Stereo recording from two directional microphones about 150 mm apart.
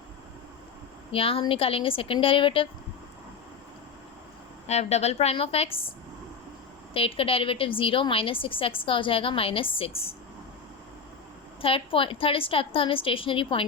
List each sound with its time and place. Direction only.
1.1 s a woman's voice: 40° left (ahead or behind)
4.6 s a woman's voice: 45° left (ahead or behind)
6.9 s a woman's voice: 40° left (ahead or behind)
11.6 s a woman's voice: 35° left (ahead or behind)